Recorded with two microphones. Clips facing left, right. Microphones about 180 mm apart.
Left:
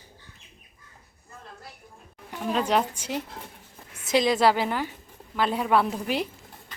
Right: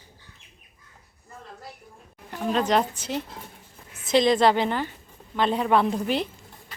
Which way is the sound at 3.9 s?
10° left (ahead or behind).